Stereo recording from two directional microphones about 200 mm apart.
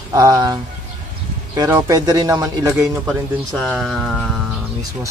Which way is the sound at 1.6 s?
15° right (ahead or behind).